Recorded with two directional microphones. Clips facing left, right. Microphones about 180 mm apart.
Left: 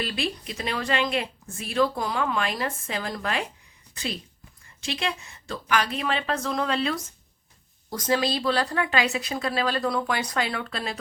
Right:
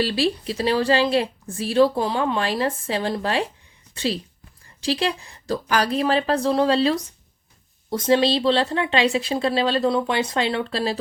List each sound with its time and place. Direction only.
0.0 s a woman's voice: 30° right (ahead or behind)